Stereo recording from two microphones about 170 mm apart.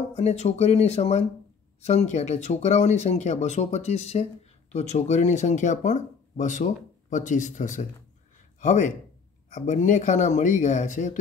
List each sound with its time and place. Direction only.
0.1 s speech: 40° left (ahead or behind)